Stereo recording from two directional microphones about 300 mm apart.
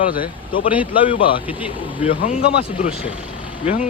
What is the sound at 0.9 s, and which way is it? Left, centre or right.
Speech, centre.